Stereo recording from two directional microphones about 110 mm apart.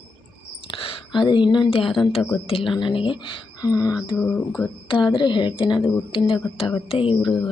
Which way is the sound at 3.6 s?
35° left (ahead or behind).